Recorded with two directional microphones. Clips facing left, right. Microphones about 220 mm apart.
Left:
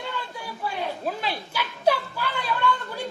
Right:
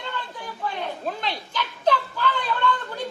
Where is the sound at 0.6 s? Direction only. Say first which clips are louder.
Even; 5° left (ahead or behind).